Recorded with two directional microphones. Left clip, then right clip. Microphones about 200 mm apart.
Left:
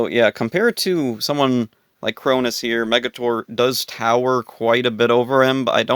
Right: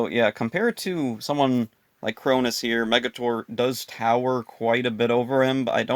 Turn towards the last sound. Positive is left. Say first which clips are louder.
# left 6 dB
turn(degrees=40)  # may be behind; listen again after turning